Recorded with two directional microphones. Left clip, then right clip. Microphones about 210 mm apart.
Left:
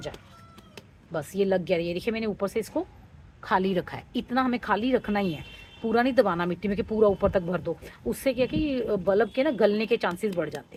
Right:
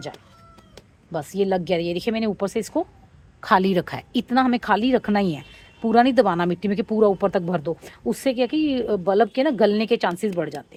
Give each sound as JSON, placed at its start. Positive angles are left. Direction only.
{"t": 1.1, "sound": "speech", "side_deg": -35}